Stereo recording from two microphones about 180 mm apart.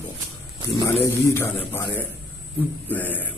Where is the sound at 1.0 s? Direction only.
15° left (ahead or behind).